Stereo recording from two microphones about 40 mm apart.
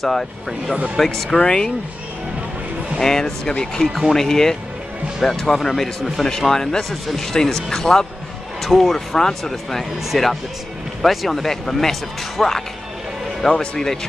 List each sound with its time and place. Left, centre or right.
0.0 s speech: centre
1.3 s speech: centre
3.0 s speech: centre